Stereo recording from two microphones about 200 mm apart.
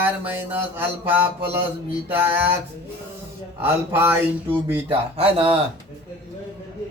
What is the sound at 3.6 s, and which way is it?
Speech, 10° right (ahead or behind).